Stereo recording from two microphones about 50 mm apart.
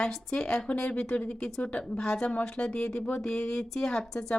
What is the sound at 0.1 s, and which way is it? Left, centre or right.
Speech, centre.